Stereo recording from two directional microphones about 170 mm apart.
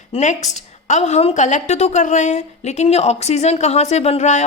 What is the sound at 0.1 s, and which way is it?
A woman's voice, 45° left (ahead or behind).